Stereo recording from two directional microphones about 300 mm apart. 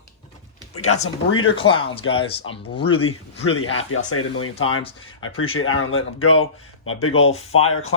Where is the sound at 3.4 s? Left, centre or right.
Left.